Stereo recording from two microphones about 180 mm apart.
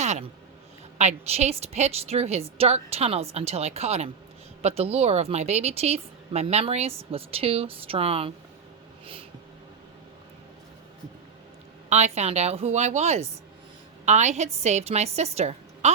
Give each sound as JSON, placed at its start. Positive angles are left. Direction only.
{"t": 0.0, "sound": "a sound", "side_deg": -40}
{"t": 0.9, "sound": "a woman's voice", "side_deg": -35}
{"t": 11.9, "sound": "a woman's voice", "side_deg": -40}